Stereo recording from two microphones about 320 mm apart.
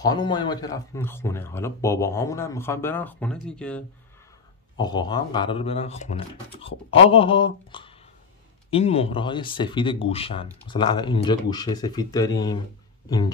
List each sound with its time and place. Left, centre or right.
0.0 s speech: centre
4.7 s speech: centre